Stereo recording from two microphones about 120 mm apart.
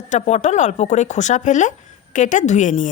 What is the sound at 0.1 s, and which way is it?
Speech, 75° left (ahead or behind).